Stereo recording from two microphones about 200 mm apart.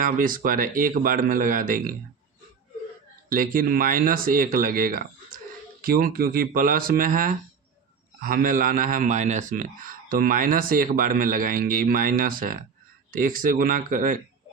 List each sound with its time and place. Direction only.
0.0 s a man's voice: 45° right (ahead or behind)
3.2 s a man's voice: 45° right (ahead or behind)